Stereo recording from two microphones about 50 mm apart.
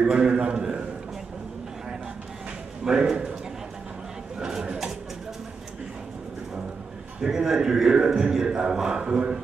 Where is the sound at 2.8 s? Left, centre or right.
Centre.